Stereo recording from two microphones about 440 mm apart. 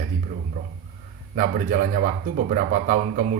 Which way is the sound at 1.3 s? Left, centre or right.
Centre.